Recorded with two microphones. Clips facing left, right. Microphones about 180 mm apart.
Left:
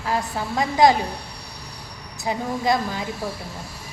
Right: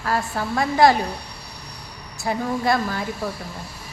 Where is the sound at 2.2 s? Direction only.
15° left (ahead or behind).